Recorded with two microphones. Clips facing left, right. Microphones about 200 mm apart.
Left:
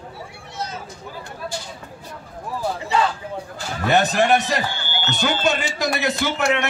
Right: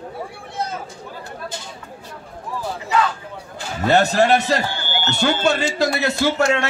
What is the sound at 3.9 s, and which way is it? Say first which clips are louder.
A man's voice: right 2 dB; 15° left (ahead or behind).